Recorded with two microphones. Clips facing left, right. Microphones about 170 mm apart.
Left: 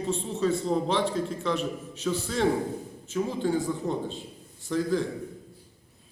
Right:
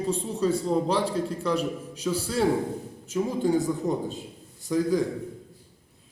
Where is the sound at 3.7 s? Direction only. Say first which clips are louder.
Right 2 dB; 10° right (ahead or behind).